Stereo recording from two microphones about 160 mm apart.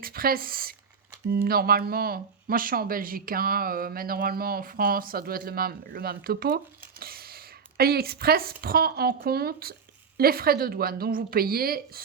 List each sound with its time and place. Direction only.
0.0 s speech: 70° right (ahead or behind)
7.0 s a sound: 70° right (ahead or behind)
8.6 s speech: 70° right (ahead or behind)